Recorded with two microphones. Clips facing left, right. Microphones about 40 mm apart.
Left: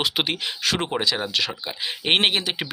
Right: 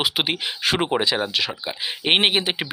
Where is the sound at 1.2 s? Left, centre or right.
Centre.